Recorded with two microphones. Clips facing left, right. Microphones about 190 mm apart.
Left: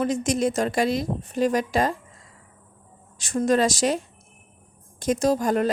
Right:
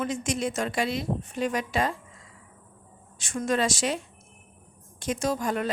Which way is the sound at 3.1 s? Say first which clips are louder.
Left 6 dB; 40° left (ahead or behind).